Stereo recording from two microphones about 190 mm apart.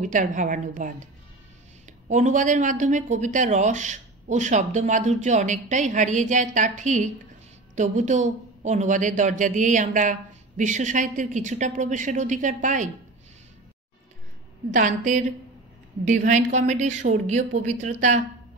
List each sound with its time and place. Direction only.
0.0 s speech: 40° right (ahead or behind)
2.0 s speech: 40° right (ahead or behind)
14.7 s speech: 40° right (ahead or behind)